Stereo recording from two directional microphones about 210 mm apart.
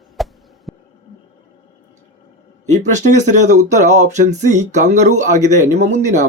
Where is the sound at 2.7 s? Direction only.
35° right (ahead or behind).